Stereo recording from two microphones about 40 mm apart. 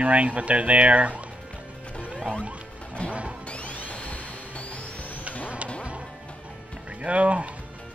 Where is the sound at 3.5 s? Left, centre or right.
Left.